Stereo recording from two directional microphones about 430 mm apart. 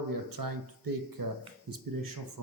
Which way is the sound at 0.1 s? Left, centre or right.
Right.